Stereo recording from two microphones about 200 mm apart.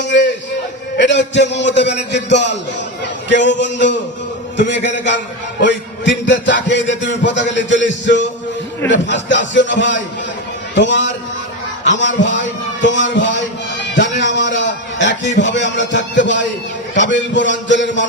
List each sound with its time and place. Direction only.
0.0 s a sound: 60° left (ahead or behind)
0.9 s a man's voice: 60° left (ahead or behind)
5.6 s music: 65° left (ahead or behind)
6.4 s a man's voice: 65° left (ahead or behind)
14.2 s a sound: 65° left (ahead or behind)
17.0 s a man's voice: 65° left (ahead or behind)